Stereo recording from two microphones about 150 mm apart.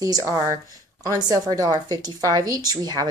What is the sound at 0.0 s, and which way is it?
A woman's voice, 25° right (ahead or behind).